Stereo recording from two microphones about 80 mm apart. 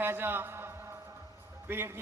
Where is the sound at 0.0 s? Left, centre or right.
Right.